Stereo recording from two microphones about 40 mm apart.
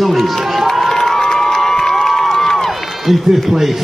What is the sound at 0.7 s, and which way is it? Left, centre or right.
Crowd, centre.